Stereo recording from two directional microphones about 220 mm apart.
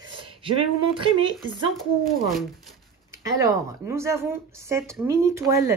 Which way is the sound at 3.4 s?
15° right (ahead or behind).